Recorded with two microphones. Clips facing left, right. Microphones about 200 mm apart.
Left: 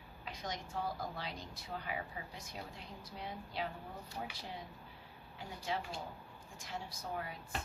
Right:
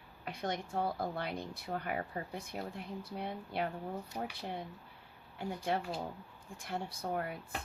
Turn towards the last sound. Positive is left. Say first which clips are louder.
# right 6 dB
turn(degrees=-55)  # may be behind; listen again after turning